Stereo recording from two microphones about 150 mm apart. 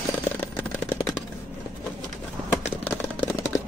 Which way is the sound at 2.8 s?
15° left (ahead or behind).